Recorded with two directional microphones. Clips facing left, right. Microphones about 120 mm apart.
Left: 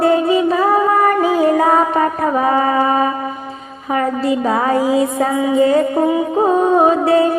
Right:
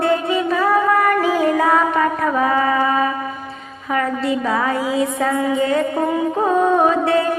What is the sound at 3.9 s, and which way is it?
A woman's voice, 30° left (ahead or behind).